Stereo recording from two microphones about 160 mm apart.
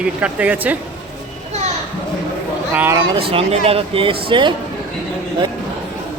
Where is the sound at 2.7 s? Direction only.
15° right (ahead or behind).